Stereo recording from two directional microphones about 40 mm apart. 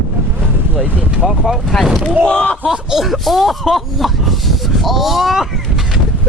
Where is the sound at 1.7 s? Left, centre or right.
Centre.